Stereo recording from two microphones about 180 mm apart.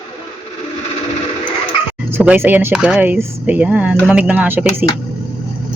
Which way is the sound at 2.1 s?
10° right (ahead or behind).